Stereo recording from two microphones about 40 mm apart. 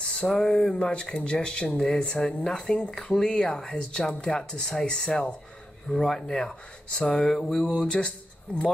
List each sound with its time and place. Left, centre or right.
0.0 s speech: centre